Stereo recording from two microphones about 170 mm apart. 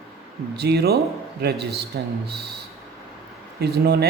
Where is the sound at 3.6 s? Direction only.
75° right (ahead or behind).